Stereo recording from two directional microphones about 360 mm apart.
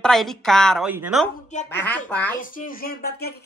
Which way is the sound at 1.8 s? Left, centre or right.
Centre.